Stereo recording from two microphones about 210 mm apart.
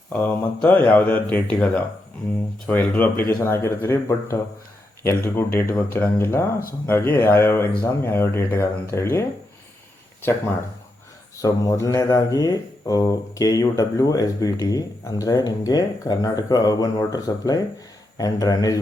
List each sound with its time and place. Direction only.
0.1 s speech: 10° left (ahead or behind)
11.3 s speech: 15° left (ahead or behind)